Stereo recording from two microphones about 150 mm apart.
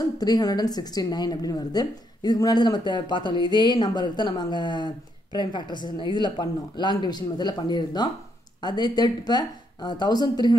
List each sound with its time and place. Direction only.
0.2 s a woman's voice: 25° left (ahead or behind)